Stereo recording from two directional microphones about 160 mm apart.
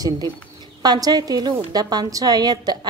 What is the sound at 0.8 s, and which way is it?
A woman's voice, 25° right (ahead or behind).